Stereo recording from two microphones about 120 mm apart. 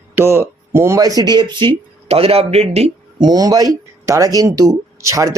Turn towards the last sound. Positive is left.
turn(degrees=-25)  # may be behind; listen again after turning